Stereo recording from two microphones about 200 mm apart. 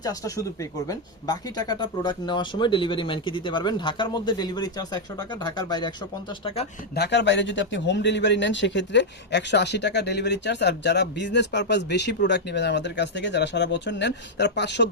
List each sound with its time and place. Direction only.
0.0 s speech: 15° left (ahead or behind)
6.9 s speech: 60° left (ahead or behind)